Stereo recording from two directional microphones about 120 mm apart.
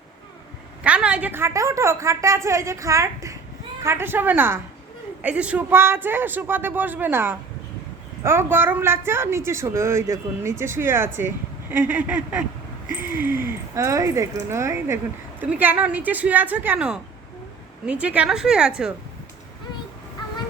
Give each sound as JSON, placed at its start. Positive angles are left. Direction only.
{"t": 0.9, "sound": "a woman's voice", "side_deg": -10}